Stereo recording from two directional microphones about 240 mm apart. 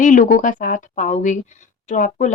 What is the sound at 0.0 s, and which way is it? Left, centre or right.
Speech, left.